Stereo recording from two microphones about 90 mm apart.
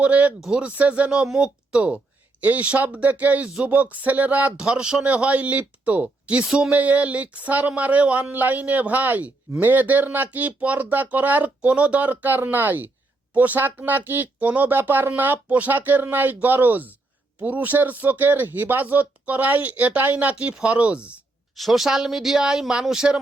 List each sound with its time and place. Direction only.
0.0 s speech: 15° right (ahead or behind)
21.5 s speech: centre (ahead or behind)